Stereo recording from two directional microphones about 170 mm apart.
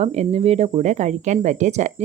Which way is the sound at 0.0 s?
40° right (ahead or behind).